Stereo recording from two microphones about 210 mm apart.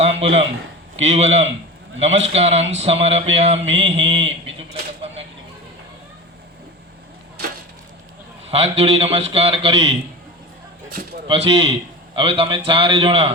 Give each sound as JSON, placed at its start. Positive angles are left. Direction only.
{"t": 0.0, "sound": "a man's voice", "side_deg": -30}
{"t": 8.4, "sound": "a man's voice", "side_deg": -30}
{"t": 11.3, "sound": "a man's voice", "side_deg": -25}